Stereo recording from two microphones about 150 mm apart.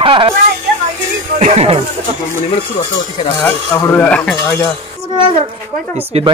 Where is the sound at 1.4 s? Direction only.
45° right (ahead or behind).